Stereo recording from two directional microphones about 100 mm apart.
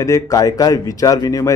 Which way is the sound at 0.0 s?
35° left (ahead or behind).